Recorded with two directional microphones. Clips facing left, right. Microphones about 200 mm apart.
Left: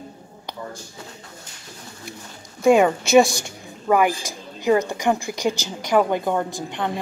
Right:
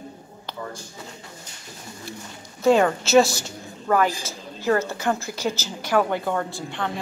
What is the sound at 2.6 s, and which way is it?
A woman's voice, 10° left (ahead or behind).